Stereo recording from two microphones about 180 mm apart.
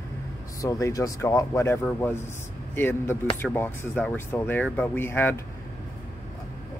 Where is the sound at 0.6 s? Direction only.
20° left (ahead or behind).